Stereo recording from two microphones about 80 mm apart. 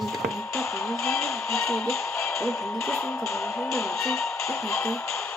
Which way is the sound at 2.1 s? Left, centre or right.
Left.